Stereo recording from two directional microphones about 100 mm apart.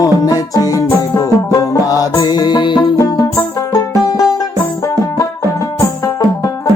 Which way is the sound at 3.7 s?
40° left (ahead or behind).